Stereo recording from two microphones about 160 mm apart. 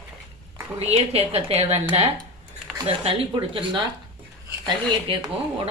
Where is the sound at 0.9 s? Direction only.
40° right (ahead or behind).